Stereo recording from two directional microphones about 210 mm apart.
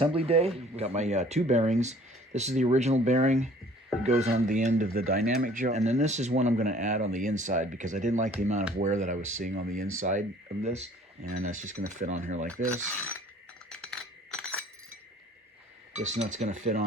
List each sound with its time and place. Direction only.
0.0 s speech: 25° right (ahead or behind)
13.7 s chink: centre (ahead or behind)
16.0 s speech: 35° right (ahead or behind)